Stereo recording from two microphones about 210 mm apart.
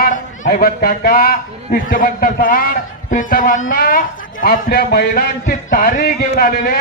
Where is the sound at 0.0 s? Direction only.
40° left (ahead or behind).